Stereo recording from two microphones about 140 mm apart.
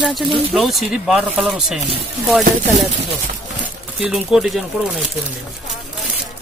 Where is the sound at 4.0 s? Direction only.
5° right (ahead or behind).